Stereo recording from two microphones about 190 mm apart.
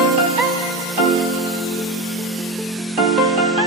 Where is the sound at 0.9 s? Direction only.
Centre (ahead or behind).